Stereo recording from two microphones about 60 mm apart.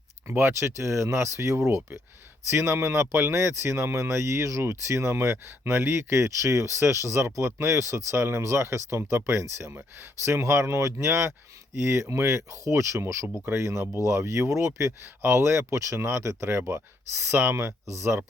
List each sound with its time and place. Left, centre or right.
0.3 s speech: right
16.0 s speech: right